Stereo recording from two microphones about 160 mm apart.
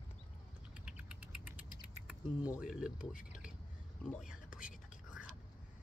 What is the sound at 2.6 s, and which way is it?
Speech, 5° right (ahead or behind).